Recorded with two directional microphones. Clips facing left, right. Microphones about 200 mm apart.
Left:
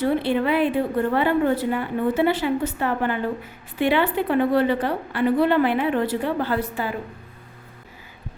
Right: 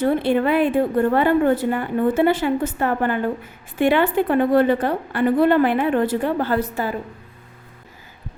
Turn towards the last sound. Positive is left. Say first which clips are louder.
# right 3 dB
turn(degrees=-45)  # may be behind; listen again after turning